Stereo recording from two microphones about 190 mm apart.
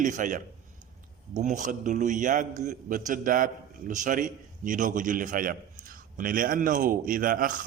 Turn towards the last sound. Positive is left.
turn(degrees=-45)  # may be behind; listen again after turning